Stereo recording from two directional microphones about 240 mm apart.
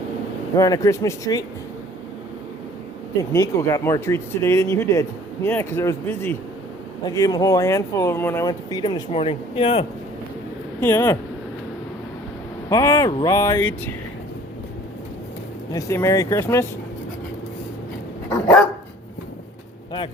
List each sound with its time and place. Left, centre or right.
0.5 s speech: centre
3.3 s speech: centre
10.8 s speech: centre
12.6 s speech: centre
15.7 s speech: centre